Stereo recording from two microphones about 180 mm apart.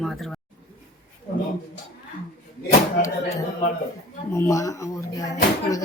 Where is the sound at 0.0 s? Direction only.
Centre (ahead or behind).